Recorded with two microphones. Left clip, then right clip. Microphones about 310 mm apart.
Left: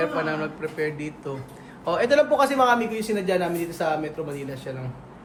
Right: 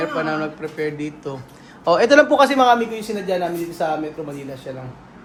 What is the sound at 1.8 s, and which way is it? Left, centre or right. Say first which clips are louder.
Speech: right 7 dB; centre.